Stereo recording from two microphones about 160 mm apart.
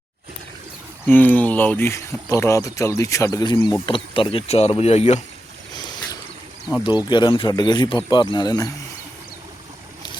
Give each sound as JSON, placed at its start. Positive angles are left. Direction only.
{"t": 1.0, "sound": "speech", "side_deg": 10}
{"t": 6.8, "sound": "speech", "side_deg": 25}